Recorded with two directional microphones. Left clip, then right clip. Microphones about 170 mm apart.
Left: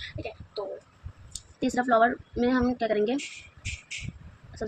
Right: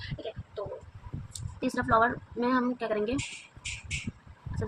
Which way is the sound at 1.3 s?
25° left (ahead or behind).